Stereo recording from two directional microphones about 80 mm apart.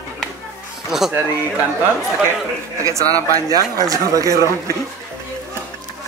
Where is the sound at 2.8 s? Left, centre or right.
Right.